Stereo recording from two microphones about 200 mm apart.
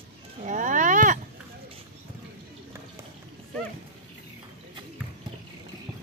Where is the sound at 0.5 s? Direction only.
40° right (ahead or behind).